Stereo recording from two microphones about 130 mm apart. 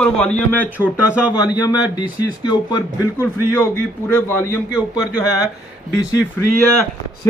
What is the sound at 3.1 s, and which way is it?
Speech, 20° left (ahead or behind).